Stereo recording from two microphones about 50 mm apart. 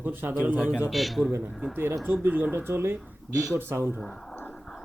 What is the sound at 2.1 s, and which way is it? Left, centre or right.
Speech, right.